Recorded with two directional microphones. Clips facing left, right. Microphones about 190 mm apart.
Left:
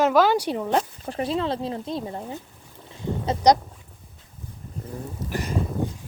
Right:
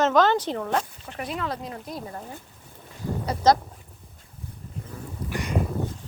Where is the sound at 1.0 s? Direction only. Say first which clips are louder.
Left 6 dB; 30° left (ahead or behind).